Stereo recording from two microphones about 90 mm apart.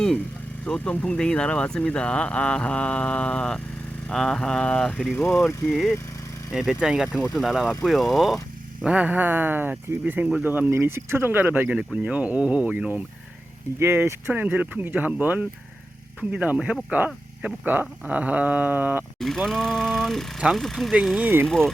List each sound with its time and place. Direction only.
0.6 s speech: 15° left (ahead or behind)
5.6 s a sound: centre (ahead or behind)
8.8 s speech: 15° right (ahead or behind)
13.7 s speech: 25° right (ahead or behind)
19.2 s a sound: 5° left (ahead or behind)
20.9 s speech: 10° right (ahead or behind)
21.4 s speech: 5° left (ahead or behind)